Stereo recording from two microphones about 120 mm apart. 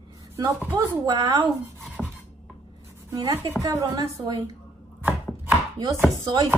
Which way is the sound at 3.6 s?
30° right (ahead or behind).